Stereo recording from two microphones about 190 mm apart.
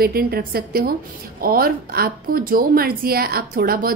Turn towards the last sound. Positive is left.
turn(degrees=-50)  # may be behind; listen again after turning